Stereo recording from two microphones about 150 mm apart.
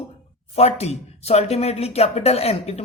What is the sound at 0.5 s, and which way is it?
Speech, 45° left (ahead or behind).